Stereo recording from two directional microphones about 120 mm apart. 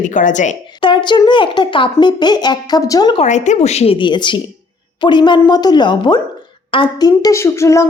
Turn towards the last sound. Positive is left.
turn(degrees=25)  # may be behind; listen again after turning